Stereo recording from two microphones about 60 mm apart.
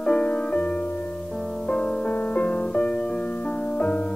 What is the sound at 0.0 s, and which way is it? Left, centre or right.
Music, centre.